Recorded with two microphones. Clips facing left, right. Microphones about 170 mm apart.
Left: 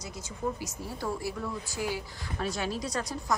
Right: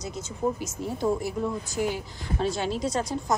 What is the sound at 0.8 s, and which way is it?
A woman's voice, 20° right (ahead or behind).